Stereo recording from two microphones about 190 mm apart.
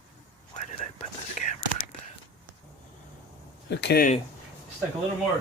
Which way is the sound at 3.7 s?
60° left (ahead or behind).